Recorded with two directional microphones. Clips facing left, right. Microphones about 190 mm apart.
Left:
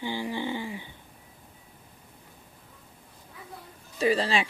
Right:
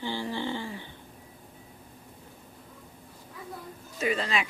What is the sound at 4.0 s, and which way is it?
Speech, 30° left (ahead or behind).